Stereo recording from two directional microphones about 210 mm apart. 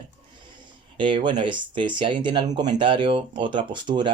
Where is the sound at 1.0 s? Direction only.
25° right (ahead or behind).